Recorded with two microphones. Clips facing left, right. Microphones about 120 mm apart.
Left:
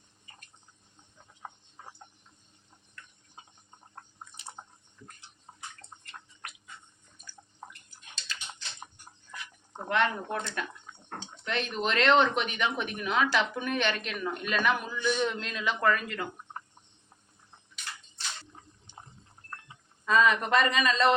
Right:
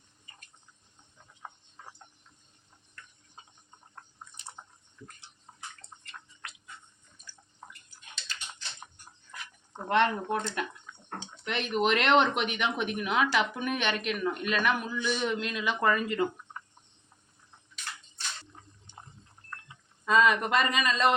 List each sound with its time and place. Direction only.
1.8 s a sound: 20° left (ahead or behind)
4.6 s drip: 35° left (ahead or behind)
9.9 s speech: 20° right (ahead or behind)
20.1 s a man's voice: 15° right (ahead or behind)